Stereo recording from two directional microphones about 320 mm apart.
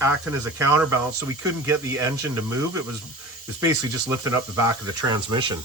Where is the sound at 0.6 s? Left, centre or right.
Centre.